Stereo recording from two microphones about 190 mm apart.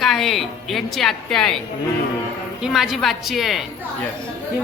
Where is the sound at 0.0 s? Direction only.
Centre (ahead or behind).